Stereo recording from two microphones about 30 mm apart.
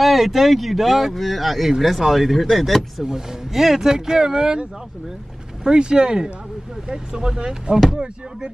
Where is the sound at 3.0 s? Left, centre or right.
Centre.